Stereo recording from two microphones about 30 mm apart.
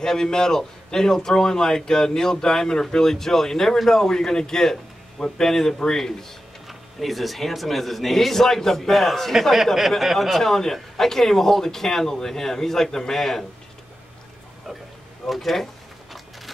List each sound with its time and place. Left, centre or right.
0.0 s a man's voice: centre
6.7 s speech: centre
15.2 s speech: centre